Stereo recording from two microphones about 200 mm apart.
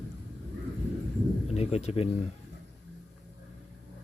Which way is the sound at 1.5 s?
30° left (ahead or behind).